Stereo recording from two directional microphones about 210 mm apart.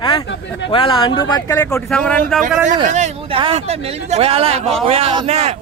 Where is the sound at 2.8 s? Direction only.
35° right (ahead or behind).